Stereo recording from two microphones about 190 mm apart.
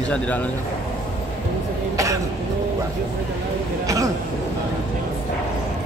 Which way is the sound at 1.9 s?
15° right (ahead or behind).